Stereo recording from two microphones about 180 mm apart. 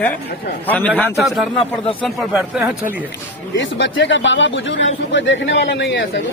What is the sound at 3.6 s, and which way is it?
Speech, 90° left.